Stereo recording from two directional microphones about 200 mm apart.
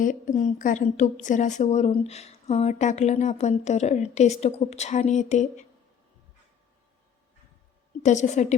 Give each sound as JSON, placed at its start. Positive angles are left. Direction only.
{"t": 0.0, "sound": "a woman's voice", "side_deg": 40}
{"t": 8.0, "sound": "a woman's voice", "side_deg": 35}